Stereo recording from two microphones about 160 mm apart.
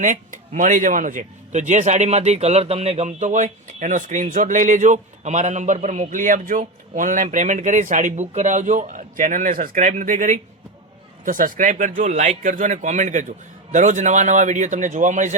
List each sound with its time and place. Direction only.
0.0 s a man's voice: 55° right (ahead or behind)